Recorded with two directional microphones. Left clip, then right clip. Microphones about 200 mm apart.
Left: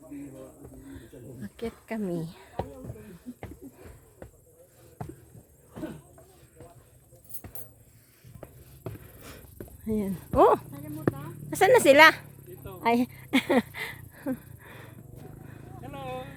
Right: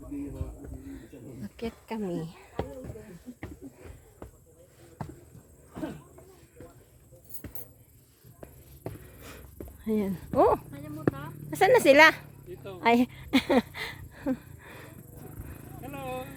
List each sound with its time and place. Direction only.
0.9 s a sound: 5° left (ahead or behind)
9.8 s a woman's voice: centre (ahead or behind)
10.3 s speech: 25° left (ahead or behind)
11.5 s speech: 10° left (ahead or behind)
12.8 s a sound: centre (ahead or behind)
15.4 s wild animals: centre (ahead or behind)